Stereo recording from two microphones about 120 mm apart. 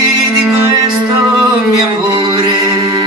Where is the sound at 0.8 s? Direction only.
40° right (ahead or behind).